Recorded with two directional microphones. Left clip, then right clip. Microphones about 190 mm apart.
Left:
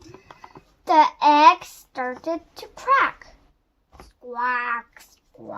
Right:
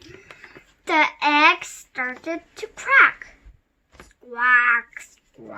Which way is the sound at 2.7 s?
40° left (ahead or behind).